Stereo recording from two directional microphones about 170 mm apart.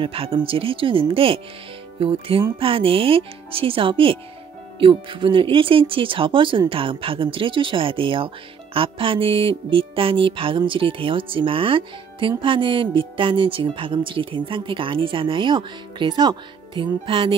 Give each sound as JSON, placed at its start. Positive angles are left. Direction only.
{"t": 0.0, "sound": "music", "side_deg": -30}